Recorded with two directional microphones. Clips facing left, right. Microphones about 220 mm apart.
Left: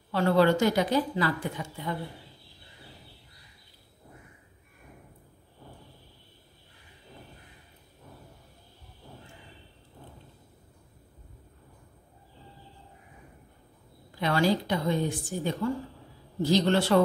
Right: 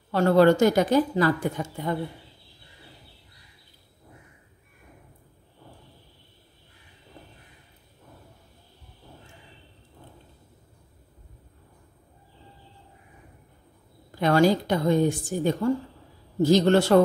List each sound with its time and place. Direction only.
0.1 s a woman's voice: 45° right (ahead or behind)
14.2 s a woman's voice: 45° right (ahead or behind)